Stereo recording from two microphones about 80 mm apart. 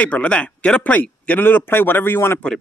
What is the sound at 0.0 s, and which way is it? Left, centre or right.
Speech, centre.